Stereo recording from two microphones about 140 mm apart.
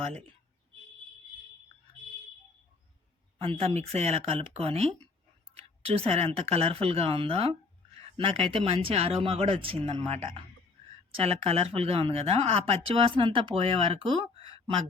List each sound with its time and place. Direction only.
3.4 s speech: 40° right (ahead or behind)